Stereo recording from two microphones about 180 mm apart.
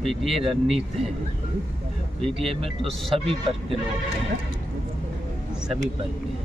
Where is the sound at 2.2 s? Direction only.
Centre (ahead or behind).